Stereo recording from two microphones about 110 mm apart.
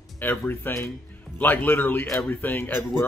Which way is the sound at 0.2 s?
20° left (ahead or behind).